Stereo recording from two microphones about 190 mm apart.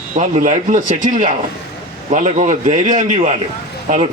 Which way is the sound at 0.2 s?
40° right (ahead or behind).